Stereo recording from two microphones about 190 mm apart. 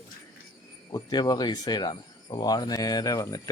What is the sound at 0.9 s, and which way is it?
Speech, 20° left (ahead or behind).